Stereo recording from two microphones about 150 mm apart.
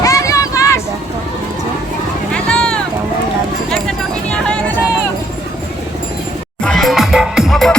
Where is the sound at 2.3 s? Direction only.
5° left (ahead or behind).